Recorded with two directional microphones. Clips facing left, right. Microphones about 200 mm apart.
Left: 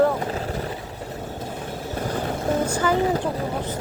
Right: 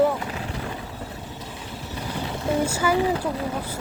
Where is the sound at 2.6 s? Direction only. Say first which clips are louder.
Right 1 dB; 10° right (ahead or behind).